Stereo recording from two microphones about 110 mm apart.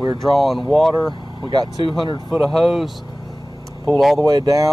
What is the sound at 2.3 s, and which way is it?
Speech, centre (ahead or behind).